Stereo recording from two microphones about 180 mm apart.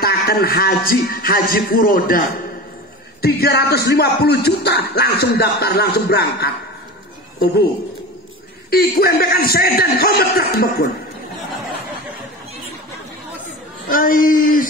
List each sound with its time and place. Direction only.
0.0 s speech: 60° left (ahead or behind)
8.6 s speech: 60° left (ahead or behind)
13.9 s speech: 50° left (ahead or behind)